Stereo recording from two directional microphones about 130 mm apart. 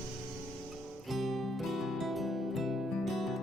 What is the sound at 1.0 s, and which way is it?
Music, centre (ahead or behind).